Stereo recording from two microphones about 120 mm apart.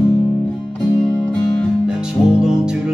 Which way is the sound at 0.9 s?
25° left (ahead or behind).